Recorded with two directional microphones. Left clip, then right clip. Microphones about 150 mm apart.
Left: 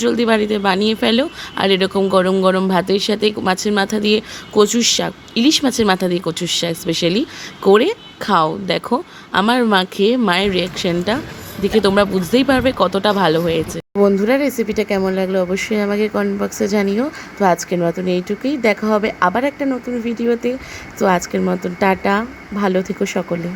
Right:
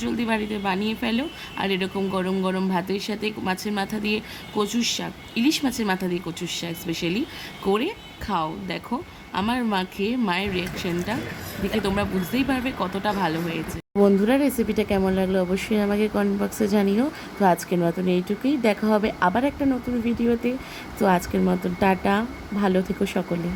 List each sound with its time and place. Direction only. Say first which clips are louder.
0.0 s a woman's voice: left 11 dB; 20° left (ahead or behind)
14.0 s speech: left 5 dB; 10° left (ahead or behind)